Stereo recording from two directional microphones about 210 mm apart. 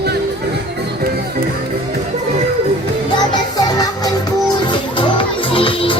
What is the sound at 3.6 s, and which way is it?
Music, 20° left (ahead or behind).